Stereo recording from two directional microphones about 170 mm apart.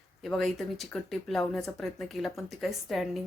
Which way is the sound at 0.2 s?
Centre (ahead or behind).